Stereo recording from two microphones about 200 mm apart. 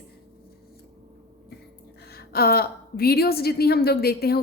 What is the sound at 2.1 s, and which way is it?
A woman's voice, 50° left (ahead or behind).